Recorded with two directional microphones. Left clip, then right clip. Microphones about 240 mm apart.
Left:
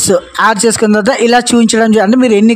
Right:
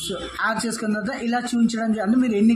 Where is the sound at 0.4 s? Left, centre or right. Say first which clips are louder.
Left 13 dB; left.